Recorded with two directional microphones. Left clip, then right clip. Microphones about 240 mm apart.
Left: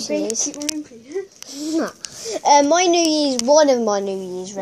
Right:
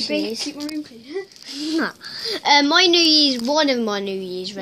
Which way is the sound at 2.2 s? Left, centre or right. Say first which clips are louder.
Left 2 dB; centre.